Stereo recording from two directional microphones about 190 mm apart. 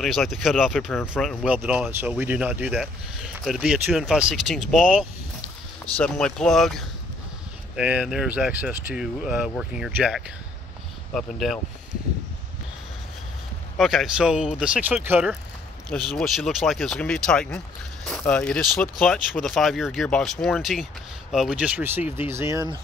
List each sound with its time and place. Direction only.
0.0 s speech: centre (ahead or behind)
13.7 s speech: centre (ahead or behind)